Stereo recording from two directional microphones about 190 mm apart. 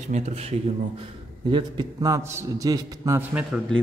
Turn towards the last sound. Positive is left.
turn(degrees=-10)  # may be behind; listen again after turning